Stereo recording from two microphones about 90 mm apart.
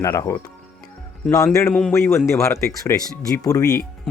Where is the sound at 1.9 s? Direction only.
30° left (ahead or behind).